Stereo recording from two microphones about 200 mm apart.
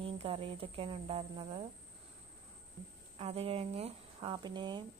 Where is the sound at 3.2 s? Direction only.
30° right (ahead or behind).